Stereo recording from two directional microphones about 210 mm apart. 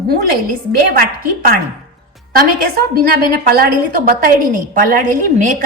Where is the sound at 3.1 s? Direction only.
45° right (ahead or behind).